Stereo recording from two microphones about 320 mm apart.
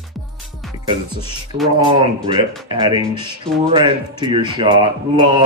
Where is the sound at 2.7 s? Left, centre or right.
Centre.